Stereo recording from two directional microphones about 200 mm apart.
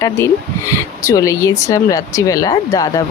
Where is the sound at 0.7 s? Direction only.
15° left (ahead or behind).